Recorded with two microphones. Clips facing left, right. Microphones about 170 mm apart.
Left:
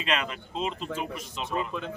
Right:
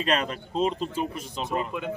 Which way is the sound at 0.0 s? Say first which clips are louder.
Right 4 dB; 40° right (ahead or behind).